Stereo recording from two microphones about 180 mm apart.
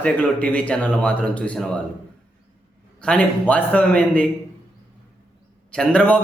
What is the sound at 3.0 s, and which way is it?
A man's voice, 5° left (ahead or behind).